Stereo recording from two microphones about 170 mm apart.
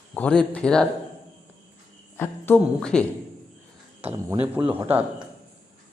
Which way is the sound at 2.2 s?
10° left (ahead or behind).